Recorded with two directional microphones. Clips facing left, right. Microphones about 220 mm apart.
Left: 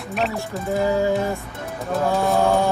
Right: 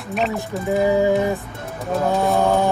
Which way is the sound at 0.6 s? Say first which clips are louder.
Right 3 dB; 15° right (ahead or behind).